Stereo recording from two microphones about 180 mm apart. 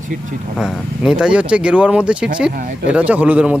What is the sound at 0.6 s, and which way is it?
Speech, 5° right (ahead or behind).